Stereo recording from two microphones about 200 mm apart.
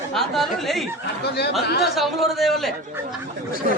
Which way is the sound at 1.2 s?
55° left (ahead or behind).